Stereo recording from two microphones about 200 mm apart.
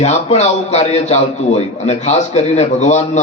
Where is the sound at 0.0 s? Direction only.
35° left (ahead or behind).